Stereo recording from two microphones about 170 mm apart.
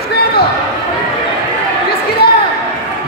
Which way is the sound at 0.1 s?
70° left (ahead or behind).